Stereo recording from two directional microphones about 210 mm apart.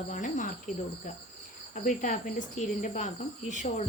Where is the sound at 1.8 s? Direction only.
40° left (ahead or behind).